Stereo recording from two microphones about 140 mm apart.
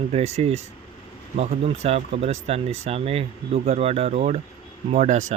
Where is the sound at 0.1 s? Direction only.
50° right (ahead or behind).